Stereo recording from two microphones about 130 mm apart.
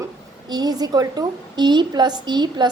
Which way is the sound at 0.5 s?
30° right (ahead or behind).